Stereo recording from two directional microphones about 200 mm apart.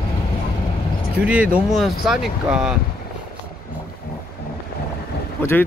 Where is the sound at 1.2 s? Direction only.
5° right (ahead or behind).